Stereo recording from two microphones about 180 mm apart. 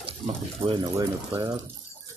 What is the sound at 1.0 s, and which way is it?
Speech, 20° right (ahead or behind).